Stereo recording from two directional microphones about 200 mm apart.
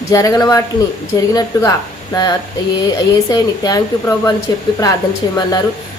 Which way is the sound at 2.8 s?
20° left (ahead or behind).